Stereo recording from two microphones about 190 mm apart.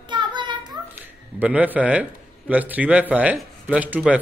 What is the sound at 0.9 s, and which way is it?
A man's voice, 10° right (ahead or behind).